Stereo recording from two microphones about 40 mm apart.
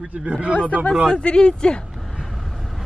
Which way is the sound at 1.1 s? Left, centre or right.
Left.